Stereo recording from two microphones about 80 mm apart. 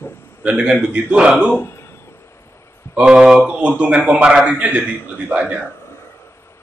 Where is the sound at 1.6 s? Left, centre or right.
Left.